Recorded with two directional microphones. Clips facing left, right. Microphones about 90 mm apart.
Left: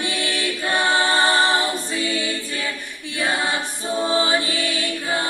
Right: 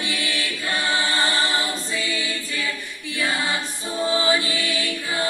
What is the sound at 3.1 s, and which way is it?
Choir, 20° left (ahead or behind).